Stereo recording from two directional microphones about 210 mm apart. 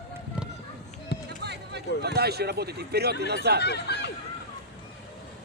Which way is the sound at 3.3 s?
50° right (ahead or behind).